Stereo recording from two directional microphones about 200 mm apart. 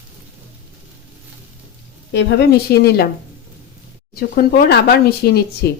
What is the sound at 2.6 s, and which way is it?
Speech, 50° left (ahead or behind).